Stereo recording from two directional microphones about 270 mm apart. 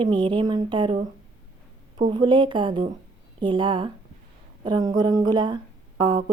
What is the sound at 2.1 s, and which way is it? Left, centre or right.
Speech, centre.